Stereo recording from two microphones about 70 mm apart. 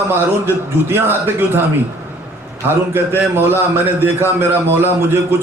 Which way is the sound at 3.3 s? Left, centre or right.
Right.